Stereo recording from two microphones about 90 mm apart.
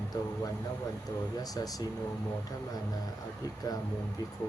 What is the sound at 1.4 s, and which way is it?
Speech, 45° left (ahead or behind).